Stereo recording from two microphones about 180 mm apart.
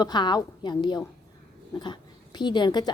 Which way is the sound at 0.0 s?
25° left (ahead or behind).